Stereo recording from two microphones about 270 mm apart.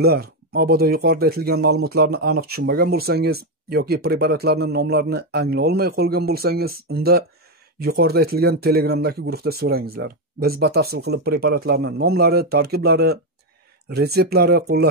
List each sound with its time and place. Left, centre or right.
0.0 s speech: right